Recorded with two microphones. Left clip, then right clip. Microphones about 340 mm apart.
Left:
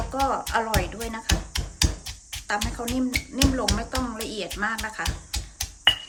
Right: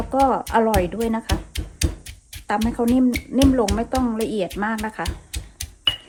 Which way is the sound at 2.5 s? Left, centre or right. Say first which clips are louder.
Right 7 dB; centre.